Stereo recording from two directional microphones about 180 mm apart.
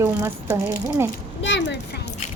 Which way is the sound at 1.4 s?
90° left.